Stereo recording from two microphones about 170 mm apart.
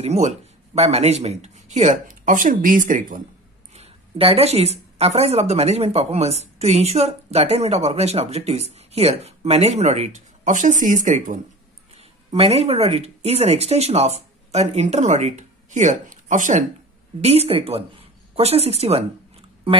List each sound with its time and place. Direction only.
0.0 s speech: 40° right (ahead or behind)
3.7 s a woman's voice: 35° right (ahead or behind)
17.2 s speech: 35° right (ahead or behind)